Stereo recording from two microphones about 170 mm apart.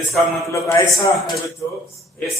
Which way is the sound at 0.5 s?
20° left (ahead or behind).